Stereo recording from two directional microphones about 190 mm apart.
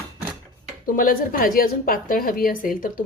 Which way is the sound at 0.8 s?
50° left (ahead or behind).